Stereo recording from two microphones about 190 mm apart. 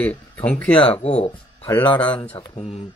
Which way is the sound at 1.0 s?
30° left (ahead or behind).